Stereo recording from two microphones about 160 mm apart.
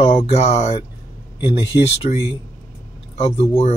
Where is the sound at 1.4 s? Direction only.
25° left (ahead or behind).